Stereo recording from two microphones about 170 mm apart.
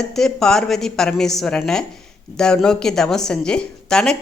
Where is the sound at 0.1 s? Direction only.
5° left (ahead or behind).